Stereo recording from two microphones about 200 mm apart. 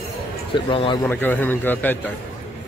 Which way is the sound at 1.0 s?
10° left (ahead or behind).